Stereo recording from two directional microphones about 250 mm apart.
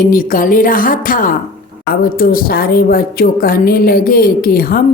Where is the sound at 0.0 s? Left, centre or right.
Left.